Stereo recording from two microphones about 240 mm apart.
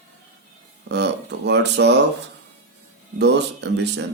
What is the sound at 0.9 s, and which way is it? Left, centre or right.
A man's voice, right.